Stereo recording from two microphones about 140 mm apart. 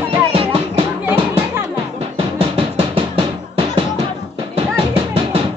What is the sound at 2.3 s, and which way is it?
Music, 40° right (ahead or behind).